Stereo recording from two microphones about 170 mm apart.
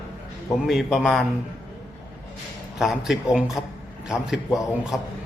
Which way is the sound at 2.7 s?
Centre (ahead or behind).